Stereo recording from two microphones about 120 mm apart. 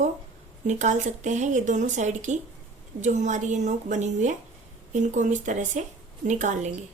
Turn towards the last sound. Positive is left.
turn(degrees=-90)